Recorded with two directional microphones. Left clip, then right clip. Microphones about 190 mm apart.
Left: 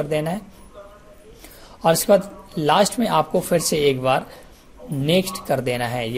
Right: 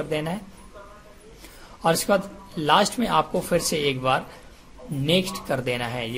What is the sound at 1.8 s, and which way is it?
Speech, 15° left (ahead or behind).